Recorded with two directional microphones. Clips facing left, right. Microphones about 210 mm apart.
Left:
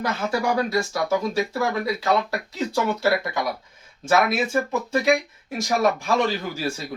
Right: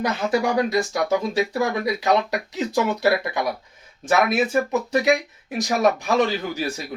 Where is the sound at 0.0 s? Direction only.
20° right (ahead or behind).